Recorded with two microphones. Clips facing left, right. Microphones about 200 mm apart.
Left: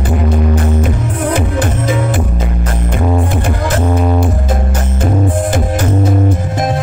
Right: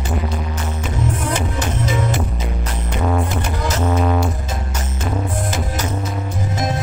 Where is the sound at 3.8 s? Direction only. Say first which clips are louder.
Left 3 dB; 15° left (ahead or behind).